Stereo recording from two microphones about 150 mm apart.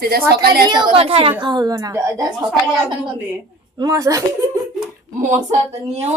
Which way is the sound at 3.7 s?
25° right (ahead or behind).